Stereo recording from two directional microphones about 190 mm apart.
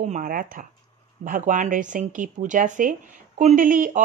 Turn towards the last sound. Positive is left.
turn(degrees=-45)  # may be behind; listen again after turning